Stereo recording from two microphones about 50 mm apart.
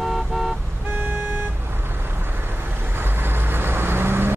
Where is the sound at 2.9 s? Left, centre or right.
Right.